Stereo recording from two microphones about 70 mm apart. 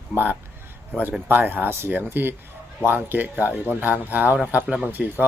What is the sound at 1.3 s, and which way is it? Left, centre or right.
Speech, right.